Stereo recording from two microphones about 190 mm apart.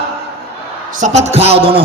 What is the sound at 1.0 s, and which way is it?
Speech, 40° right (ahead or behind).